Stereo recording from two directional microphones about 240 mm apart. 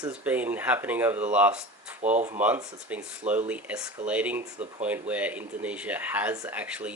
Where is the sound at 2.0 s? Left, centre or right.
Right.